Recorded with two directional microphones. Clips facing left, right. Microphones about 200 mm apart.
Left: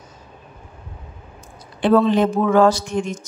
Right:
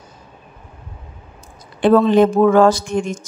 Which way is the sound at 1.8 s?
50° right (ahead or behind).